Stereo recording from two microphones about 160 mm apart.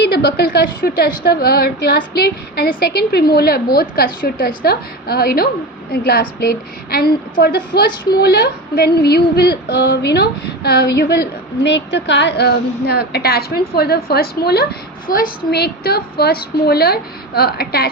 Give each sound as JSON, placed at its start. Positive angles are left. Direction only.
{"t": 0.0, "sound": "a woman's voice", "side_deg": 90}